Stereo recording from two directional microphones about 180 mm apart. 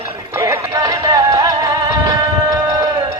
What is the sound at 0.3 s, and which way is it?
Music, 15° right (ahead or behind).